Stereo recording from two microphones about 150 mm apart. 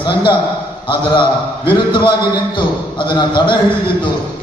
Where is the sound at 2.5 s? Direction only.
30° left (ahead or behind).